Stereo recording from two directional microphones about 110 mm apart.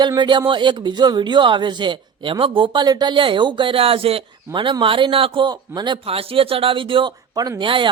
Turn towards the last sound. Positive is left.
turn(degrees=-50)  # may be behind; listen again after turning